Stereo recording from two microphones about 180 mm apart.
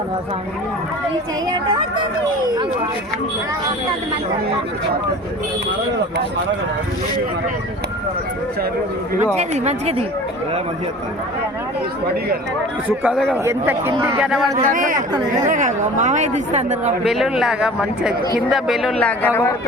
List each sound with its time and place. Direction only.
9.3 s speech: 40° right (ahead or behind)
13.0 s speech: 5° right (ahead or behind)
14.5 s speech: 45° right (ahead or behind)
17.0 s speech: centre (ahead or behind)